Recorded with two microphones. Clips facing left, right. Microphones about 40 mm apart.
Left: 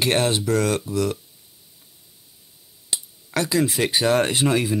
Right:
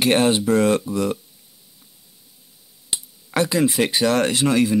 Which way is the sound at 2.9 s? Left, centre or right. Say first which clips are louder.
Right 2 dB; centre.